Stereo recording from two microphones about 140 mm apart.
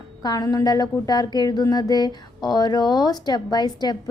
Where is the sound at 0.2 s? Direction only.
25° left (ahead or behind).